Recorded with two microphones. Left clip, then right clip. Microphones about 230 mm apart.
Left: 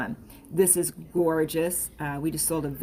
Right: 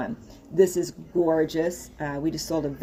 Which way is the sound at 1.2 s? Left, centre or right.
Left.